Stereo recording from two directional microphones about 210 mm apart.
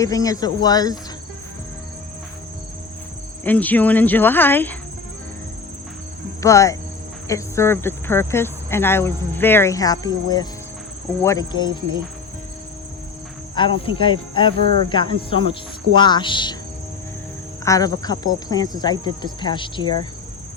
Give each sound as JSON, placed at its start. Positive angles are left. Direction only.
{"t": 0.0, "sound": "speech", "side_deg": 15}
{"t": 3.4, "sound": "speech", "side_deg": 10}
{"t": 6.4, "sound": "speech", "side_deg": 15}
{"t": 13.6, "sound": "speech", "side_deg": 25}
{"t": 17.7, "sound": "speech", "side_deg": 15}